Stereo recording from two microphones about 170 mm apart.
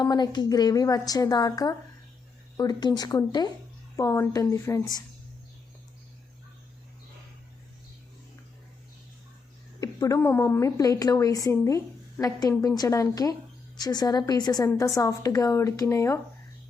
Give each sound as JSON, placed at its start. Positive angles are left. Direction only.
{"t": 0.0, "sound": "a woman's voice", "side_deg": 25}
{"t": 9.8, "sound": "a woman's voice", "side_deg": 20}